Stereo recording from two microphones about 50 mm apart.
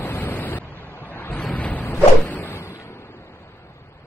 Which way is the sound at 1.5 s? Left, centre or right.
Left.